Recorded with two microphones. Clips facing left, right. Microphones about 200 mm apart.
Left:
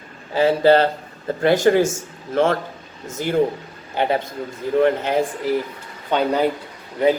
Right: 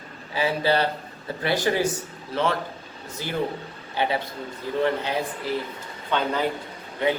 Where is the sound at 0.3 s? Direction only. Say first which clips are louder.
Left 8 dB; 50° left (ahead or behind).